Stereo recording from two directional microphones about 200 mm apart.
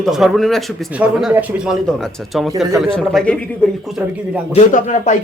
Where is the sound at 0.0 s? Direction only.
Centre (ahead or behind).